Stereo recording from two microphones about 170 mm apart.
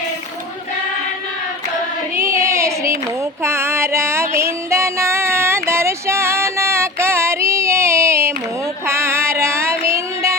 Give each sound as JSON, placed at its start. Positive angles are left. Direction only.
{"t": 2.1, "sound": "child singing", "side_deg": -15}
{"t": 3.4, "sound": "music", "side_deg": -15}